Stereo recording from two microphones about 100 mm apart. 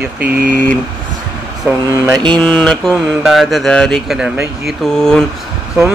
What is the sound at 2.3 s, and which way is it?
Mantra, 10° left (ahead or behind).